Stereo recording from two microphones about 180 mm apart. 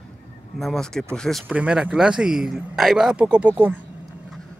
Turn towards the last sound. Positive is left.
turn(degrees=-5)  # may be behind; listen again after turning